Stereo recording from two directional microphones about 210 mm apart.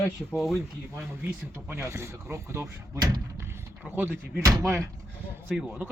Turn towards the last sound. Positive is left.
turn(degrees=-5)  # may be behind; listen again after turning